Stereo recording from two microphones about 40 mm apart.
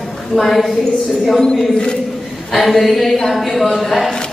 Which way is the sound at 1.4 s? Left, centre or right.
Left.